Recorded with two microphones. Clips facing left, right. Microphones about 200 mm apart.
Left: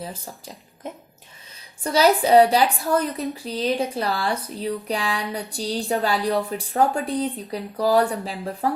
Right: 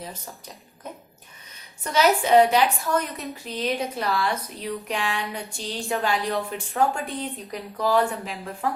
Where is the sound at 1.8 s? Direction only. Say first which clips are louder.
Left 3 dB; 35° left (ahead or behind).